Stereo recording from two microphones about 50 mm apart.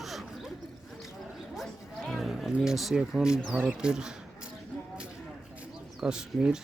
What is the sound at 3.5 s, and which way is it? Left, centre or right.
Speech, right.